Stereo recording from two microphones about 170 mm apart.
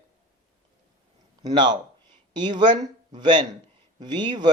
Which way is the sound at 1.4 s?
25° right (ahead or behind).